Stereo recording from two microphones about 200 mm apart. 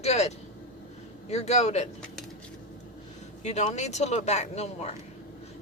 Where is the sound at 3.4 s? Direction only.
35° left (ahead or behind).